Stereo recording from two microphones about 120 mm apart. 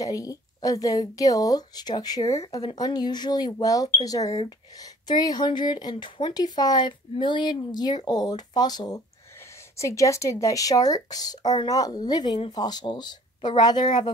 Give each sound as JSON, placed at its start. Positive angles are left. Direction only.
{"t": 0.0, "sound": "speech", "side_deg": 30}